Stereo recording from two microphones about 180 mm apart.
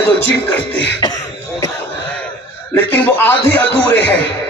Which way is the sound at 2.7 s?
10° left (ahead or behind).